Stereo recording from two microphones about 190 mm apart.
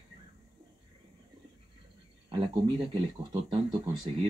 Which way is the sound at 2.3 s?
25° right (ahead or behind).